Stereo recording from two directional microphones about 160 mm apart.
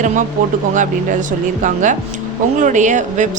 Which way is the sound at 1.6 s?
50° right (ahead or behind).